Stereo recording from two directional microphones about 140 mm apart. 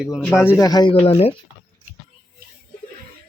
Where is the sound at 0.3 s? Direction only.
20° left (ahead or behind).